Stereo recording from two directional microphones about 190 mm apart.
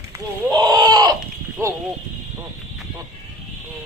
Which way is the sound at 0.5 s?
20° right (ahead or behind).